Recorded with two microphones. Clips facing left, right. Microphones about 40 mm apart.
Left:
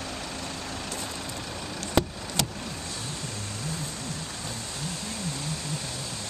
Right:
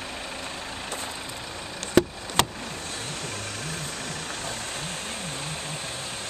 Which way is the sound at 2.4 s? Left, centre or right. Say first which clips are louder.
Right 6 dB; right.